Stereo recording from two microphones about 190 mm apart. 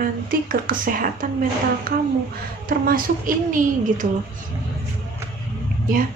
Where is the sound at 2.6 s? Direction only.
50° right (ahead or behind).